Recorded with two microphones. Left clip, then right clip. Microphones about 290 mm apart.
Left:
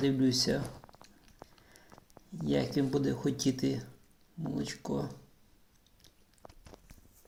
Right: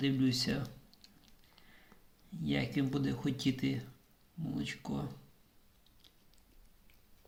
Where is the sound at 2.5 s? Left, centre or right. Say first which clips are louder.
Left 5 dB; right.